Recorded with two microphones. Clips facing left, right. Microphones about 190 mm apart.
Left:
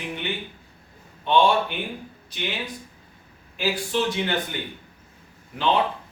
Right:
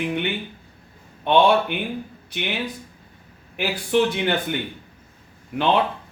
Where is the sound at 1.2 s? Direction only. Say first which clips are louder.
Right 3 dB; 60° right (ahead or behind).